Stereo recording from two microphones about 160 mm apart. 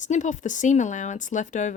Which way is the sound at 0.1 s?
50° left (ahead or behind).